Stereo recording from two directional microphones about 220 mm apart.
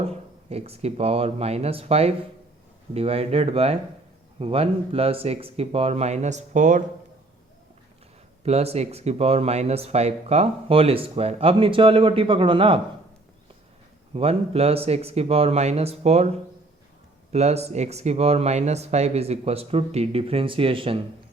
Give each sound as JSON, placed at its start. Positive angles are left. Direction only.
{"t": 0.1, "sound": "speech", "side_deg": -30}
{"t": 8.4, "sound": "speech", "side_deg": -30}
{"t": 14.1, "sound": "speech", "side_deg": -25}
{"t": 17.3, "sound": "speech", "side_deg": -30}